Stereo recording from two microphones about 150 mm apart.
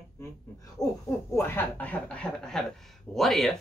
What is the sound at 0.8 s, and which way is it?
Speech, 25° left (ahead or behind).